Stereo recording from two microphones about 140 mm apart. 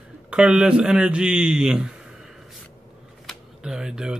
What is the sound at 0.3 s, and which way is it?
Speech, 5° right (ahead or behind).